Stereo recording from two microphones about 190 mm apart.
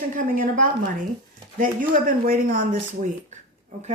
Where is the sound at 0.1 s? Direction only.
45° right (ahead or behind).